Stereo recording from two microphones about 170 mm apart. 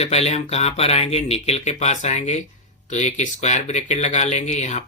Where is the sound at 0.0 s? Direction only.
40° left (ahead or behind).